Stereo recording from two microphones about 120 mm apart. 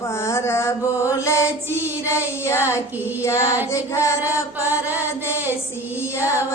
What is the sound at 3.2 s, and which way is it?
Speech, 25° left (ahead or behind).